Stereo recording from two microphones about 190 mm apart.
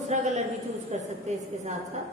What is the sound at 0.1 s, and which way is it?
A woman's voice, 35° right (ahead or behind).